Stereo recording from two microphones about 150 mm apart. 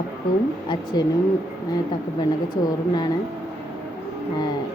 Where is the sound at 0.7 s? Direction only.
30° left (ahead or behind).